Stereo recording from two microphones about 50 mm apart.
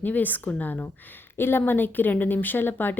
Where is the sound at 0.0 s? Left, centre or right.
Left.